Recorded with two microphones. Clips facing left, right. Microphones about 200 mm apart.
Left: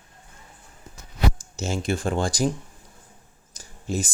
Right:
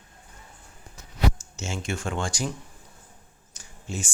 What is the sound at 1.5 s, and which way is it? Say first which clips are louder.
Speech: left 6 dB; 35° left (ahead or behind).